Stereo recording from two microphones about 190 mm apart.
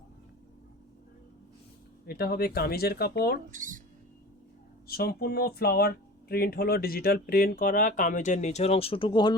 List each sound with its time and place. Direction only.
2.0 s speech: 55° left (ahead or behind)
3.5 s speech: 45° right (ahead or behind)
4.9 s speech: 50° left (ahead or behind); by 9.3 s 25° left (ahead or behind)